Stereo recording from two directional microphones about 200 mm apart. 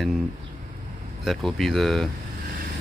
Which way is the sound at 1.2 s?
Centre (ahead or behind).